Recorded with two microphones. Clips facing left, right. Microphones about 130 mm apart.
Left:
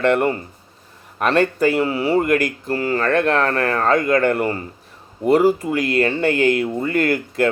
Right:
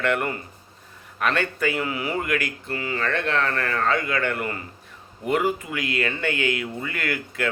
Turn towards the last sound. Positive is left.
turn(degrees=40)  # may be behind; listen again after turning